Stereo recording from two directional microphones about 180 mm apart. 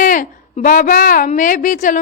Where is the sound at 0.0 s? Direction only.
50° left (ahead or behind).